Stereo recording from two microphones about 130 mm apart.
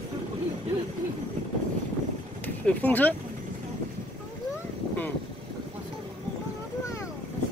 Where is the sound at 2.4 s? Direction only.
10° left (ahead or behind).